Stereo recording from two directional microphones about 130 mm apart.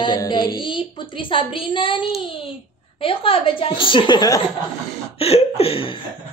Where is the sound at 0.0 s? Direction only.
35° left (ahead or behind).